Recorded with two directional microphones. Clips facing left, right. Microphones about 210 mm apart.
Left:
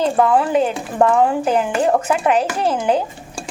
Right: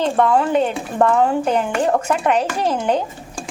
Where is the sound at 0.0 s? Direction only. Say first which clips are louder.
Left 1 dB; 5° left (ahead or behind).